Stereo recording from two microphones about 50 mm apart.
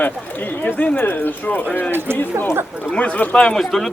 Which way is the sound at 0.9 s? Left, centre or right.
Left.